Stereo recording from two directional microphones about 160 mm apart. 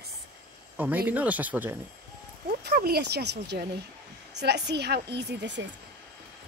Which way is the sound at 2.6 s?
75° right (ahead or behind).